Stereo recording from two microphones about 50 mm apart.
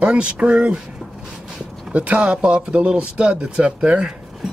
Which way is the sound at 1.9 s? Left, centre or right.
Right.